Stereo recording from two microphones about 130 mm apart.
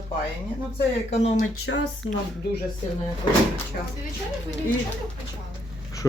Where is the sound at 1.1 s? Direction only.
55° left (ahead or behind).